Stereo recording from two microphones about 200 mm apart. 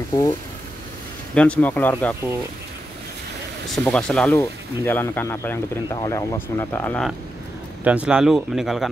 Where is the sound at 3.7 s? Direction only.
5° left (ahead or behind).